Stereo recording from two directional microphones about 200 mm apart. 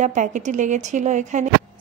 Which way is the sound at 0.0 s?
40° right (ahead or behind).